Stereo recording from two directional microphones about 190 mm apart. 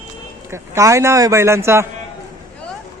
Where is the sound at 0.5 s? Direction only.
15° right (ahead or behind).